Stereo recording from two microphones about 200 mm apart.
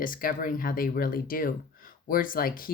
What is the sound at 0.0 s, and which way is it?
Speech, 45° left (ahead or behind).